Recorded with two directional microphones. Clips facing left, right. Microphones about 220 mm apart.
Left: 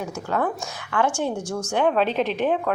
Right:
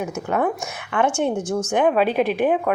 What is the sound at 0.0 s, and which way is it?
A woman's voice, 20° right (ahead or behind).